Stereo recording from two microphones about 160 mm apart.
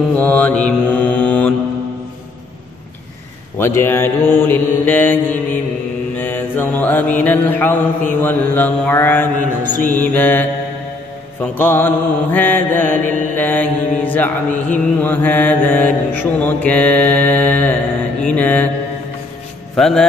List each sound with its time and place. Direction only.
0.2 s mantra: 10° left (ahead or behind)
3.5 s mantra: 15° left (ahead or behind)
11.5 s mantra: 10° left (ahead or behind)
19.7 s speech: 5° left (ahead or behind)